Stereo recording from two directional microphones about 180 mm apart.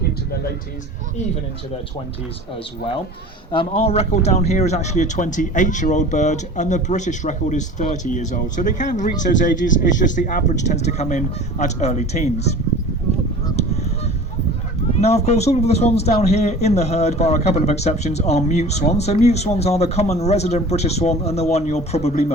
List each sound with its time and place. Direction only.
3.5 s a man's voice: 30° left (ahead or behind)
15.0 s a man's voice: 35° left (ahead or behind)